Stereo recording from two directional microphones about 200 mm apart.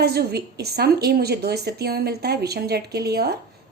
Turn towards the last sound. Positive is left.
turn(degrees=-55)  # may be behind; listen again after turning